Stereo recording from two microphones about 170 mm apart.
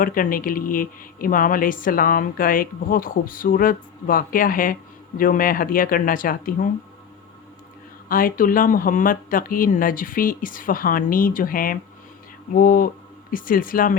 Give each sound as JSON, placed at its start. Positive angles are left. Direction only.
{"t": 0.0, "sound": "speech", "side_deg": 55}
{"t": 8.1, "sound": "speech", "side_deg": 55}